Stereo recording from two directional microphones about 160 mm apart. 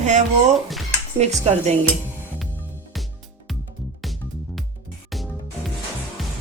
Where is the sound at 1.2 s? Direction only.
45° right (ahead or behind).